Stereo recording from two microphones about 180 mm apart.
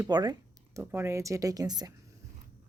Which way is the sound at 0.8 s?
10° right (ahead or behind).